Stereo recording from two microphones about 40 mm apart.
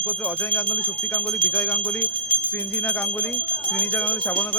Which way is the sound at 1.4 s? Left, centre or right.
Left.